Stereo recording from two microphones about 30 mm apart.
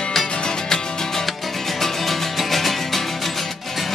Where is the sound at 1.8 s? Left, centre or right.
Centre.